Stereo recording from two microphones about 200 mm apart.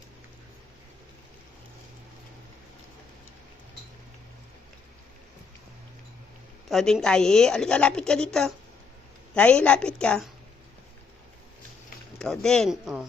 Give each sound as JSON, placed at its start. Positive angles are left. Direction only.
{"t": 6.7, "sound": "a woman's voice", "side_deg": 0}
{"t": 12.2, "sound": "a woman's voice", "side_deg": 0}